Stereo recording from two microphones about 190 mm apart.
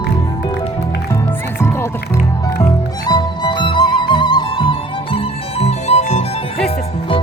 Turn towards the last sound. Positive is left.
turn(degrees=35)  # may be behind; listen again after turning